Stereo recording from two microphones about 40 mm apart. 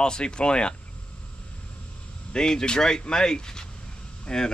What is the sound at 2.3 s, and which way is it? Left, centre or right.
A man's voice, centre.